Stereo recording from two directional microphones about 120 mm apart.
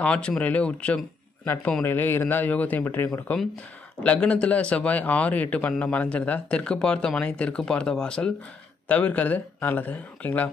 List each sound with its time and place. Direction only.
0.0 s speech: 10° left (ahead or behind)